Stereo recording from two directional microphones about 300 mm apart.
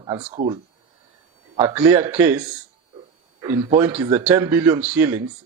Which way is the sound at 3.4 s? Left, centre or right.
Centre.